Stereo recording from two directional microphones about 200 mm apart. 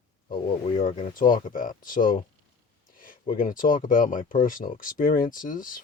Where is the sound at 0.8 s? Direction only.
45° left (ahead or behind).